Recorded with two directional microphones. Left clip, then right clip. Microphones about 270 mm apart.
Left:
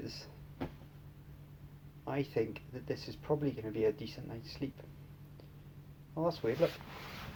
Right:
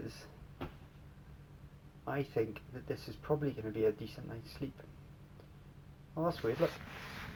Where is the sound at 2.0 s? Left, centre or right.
Left.